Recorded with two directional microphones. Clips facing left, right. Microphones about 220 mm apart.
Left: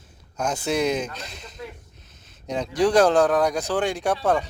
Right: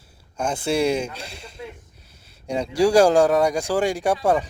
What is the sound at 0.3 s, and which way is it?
Speech, 10° right (ahead or behind).